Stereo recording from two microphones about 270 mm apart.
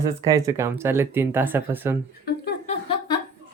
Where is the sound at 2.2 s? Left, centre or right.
Left.